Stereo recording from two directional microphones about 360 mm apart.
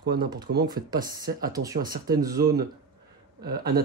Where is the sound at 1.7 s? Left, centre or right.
Right.